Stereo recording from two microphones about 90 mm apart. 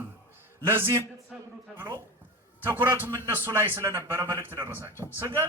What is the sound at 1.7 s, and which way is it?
A man's voice, 25° right (ahead or behind).